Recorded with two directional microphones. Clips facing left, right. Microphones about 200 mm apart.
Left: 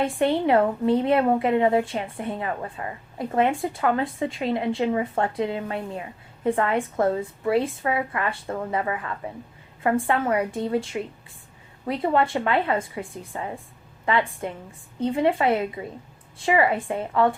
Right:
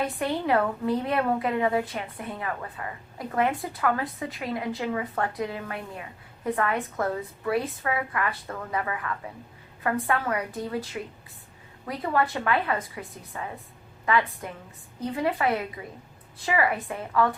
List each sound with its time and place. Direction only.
0.0 s a woman's voice: 25° left (ahead or behind)